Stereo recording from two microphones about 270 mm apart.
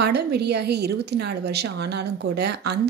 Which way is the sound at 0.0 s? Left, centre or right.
Right.